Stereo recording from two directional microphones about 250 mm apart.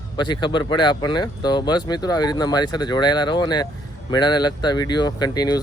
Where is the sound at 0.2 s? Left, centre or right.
Centre.